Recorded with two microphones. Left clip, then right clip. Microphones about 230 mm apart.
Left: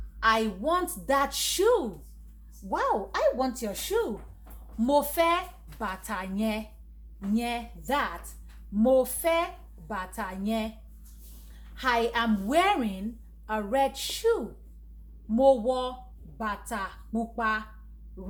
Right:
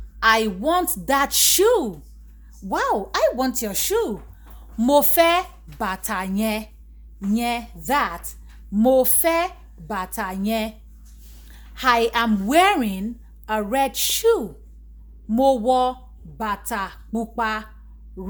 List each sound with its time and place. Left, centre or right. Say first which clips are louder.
0.2 s a woman's voice: right 7 dB; right